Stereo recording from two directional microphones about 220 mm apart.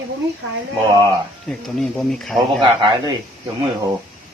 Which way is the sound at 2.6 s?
25° right (ahead or behind).